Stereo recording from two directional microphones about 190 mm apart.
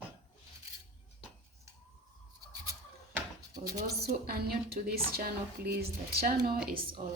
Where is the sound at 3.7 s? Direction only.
55° right (ahead or behind).